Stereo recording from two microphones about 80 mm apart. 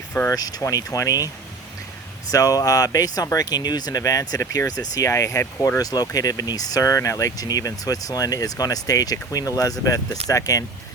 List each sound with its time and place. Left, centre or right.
0.3 s speech: left
2.3 s speech: left